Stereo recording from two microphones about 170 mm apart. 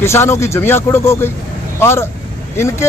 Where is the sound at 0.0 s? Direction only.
15° left (ahead or behind).